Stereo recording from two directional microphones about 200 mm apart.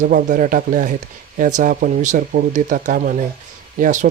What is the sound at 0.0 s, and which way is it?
Speech, 40° right (ahead or behind).